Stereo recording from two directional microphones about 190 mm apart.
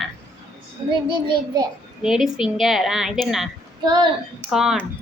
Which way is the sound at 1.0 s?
25° right (ahead or behind).